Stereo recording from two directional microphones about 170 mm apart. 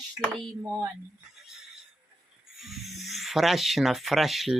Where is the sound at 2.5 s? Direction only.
Centre (ahead or behind).